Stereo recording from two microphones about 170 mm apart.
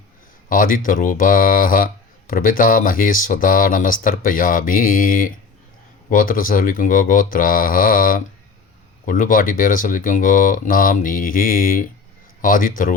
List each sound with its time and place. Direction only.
0.4 s speech: 55° left (ahead or behind)